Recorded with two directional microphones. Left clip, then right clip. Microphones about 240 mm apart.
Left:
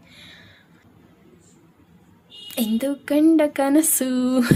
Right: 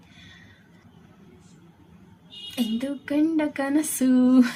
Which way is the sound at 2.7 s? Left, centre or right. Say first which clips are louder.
Left 6 dB; left.